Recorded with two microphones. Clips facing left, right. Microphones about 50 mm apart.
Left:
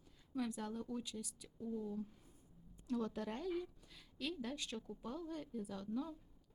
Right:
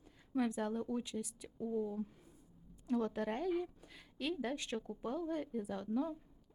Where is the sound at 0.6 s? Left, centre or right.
Right.